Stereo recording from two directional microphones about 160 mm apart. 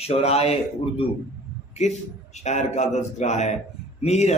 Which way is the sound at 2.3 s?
45° left (ahead or behind).